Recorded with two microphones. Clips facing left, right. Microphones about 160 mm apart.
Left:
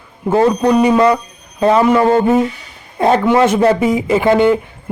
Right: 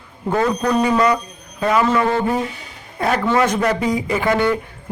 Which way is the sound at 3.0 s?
25° left (ahead or behind).